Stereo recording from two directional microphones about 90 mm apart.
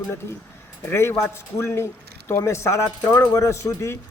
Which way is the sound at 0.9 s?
30° left (ahead or behind).